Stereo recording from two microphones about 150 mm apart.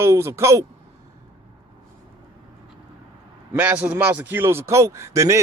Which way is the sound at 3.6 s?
10° right (ahead or behind).